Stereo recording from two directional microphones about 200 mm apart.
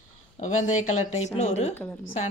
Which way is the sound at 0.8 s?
90° left.